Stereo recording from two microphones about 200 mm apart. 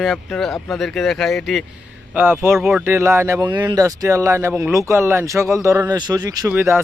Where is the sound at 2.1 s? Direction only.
10° right (ahead or behind).